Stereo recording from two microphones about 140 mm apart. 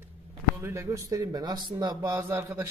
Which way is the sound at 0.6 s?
20° right (ahead or behind).